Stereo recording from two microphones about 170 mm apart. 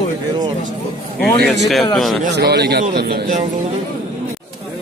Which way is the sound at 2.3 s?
75° right (ahead or behind).